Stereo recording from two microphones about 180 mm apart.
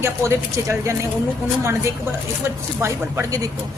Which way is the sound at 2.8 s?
15° right (ahead or behind).